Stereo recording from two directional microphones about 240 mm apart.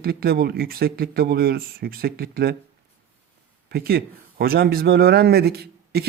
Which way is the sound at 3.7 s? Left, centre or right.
Right.